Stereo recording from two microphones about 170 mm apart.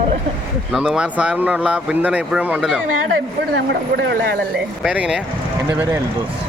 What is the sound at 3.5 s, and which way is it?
Speech, 90° right.